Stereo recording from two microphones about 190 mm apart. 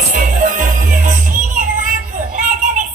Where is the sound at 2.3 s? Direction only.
40° right (ahead or behind).